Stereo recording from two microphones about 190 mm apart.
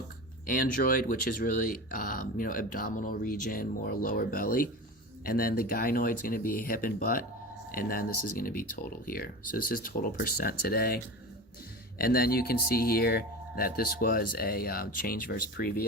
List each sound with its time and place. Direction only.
0.4 s speech: 45° left (ahead or behind)